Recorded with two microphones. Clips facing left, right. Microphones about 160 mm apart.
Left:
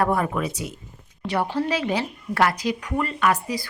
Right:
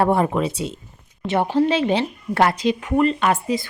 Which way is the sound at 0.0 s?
25° right (ahead or behind).